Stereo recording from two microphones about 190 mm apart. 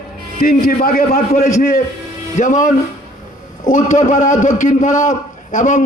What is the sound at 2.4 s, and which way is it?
A man's voice, 40° left (ahead or behind).